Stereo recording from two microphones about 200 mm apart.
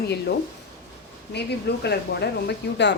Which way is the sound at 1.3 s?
55° left (ahead or behind).